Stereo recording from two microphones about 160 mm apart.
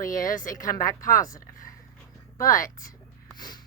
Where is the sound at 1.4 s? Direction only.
60° left (ahead or behind).